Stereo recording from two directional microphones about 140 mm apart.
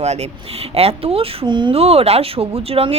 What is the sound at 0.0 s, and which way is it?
A woman's voice, 55° right (ahead or behind).